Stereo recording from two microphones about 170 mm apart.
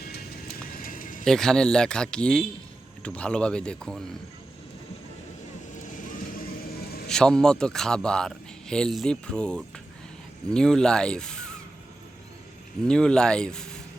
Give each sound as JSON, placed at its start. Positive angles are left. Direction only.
{"t": 0.0, "sound": "music", "side_deg": 65}
{"t": 1.2, "sound": "speech", "side_deg": 5}
{"t": 5.7, "sound": "vehicle", "side_deg": 50}
{"t": 7.1, "sound": "speech", "side_deg": 5}
{"t": 12.8, "sound": "speech", "side_deg": 5}